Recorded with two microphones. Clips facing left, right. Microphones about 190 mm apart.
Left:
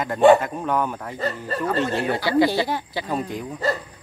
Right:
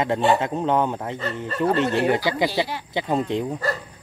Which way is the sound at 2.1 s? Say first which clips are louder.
Left 3 dB; 15° right (ahead or behind).